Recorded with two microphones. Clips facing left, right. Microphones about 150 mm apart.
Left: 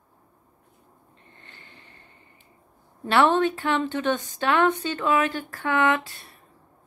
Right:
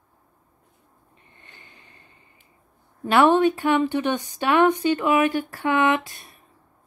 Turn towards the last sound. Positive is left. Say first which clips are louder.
# right 2 dB
turn(degrees=-15)  # may be behind; listen again after turning